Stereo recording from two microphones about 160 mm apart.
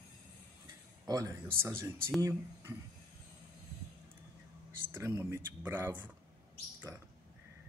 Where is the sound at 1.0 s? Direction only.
20° right (ahead or behind).